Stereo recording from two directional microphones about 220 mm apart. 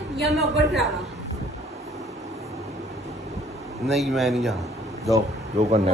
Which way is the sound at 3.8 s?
Centre (ahead or behind).